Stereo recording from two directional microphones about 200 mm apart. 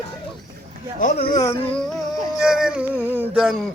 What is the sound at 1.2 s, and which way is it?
Speech, 15° left (ahead or behind).